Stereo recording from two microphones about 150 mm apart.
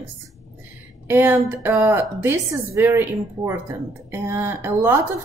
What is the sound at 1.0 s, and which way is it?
A woman's voice, 15° right (ahead or behind).